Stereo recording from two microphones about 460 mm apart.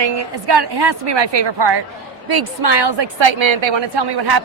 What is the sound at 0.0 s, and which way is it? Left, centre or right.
A woman's voice, right.